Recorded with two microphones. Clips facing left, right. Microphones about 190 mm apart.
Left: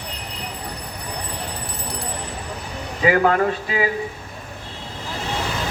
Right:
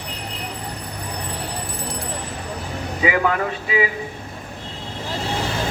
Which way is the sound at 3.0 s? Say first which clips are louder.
Left 3 dB; 45° left (ahead or behind).